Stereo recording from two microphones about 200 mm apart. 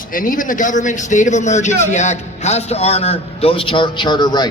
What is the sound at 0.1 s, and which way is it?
A man's voice, 45° left (ahead or behind).